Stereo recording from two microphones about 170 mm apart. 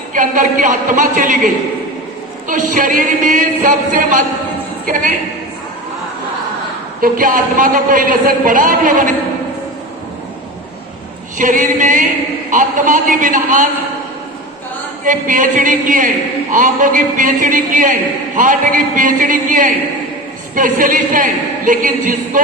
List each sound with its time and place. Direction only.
0.1 s a woman's voice: 50° right (ahead or behind)
2.5 s a woman's voice: 50° right (ahead or behind)
7.0 s a woman's voice: 55° right (ahead or behind)
11.3 s a woman's voice: 50° right (ahead or behind)
15.0 s a woman's voice: 50° right (ahead or behind)